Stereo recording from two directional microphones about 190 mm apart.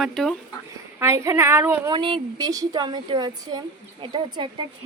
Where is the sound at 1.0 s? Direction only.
15° right (ahead or behind).